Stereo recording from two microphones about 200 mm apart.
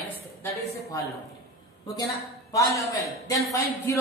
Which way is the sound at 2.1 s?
15° left (ahead or behind).